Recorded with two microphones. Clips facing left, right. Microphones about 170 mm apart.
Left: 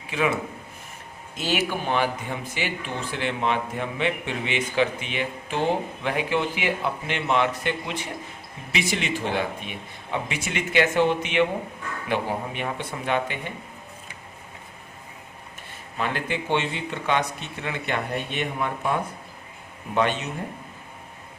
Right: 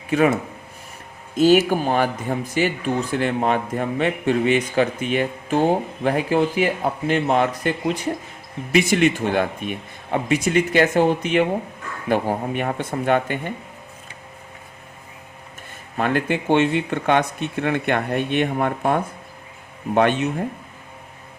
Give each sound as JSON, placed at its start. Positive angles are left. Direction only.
{"t": 0.1, "sound": "speech", "side_deg": -45}
{"t": 1.4, "sound": "speech", "side_deg": -45}
{"t": 16.0, "sound": "speech", "side_deg": -50}